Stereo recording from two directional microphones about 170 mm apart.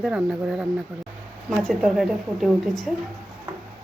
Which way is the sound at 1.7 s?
Centre (ahead or behind).